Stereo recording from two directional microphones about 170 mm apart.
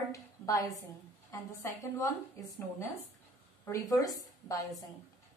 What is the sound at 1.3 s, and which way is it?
Speech, 15° left (ahead or behind).